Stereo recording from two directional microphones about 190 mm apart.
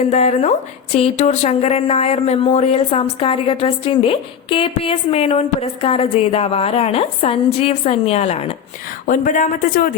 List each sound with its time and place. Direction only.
0.1 s speech: 35° left (ahead or behind)
9.0 s speech: 45° left (ahead or behind)